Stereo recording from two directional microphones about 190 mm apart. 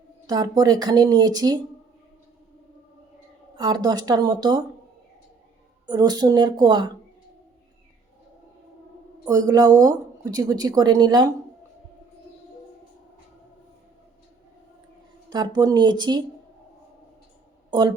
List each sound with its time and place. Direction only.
0.3 s speech: 20° right (ahead or behind)
3.5 s speech: 25° right (ahead or behind)
5.8 s speech: 20° right (ahead or behind)
9.2 s speech: 20° right (ahead or behind)
15.3 s speech: 20° right (ahead or behind)
17.7 s speech: 25° right (ahead or behind)